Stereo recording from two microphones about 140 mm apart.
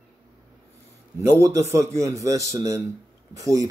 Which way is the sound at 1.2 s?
20° right (ahead or behind).